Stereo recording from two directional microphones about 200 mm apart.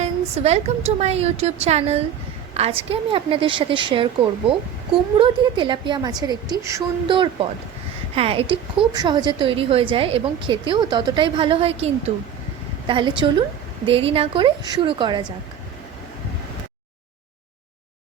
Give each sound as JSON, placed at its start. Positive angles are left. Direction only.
{"t": 0.0, "sound": "a woman's voice", "side_deg": -30}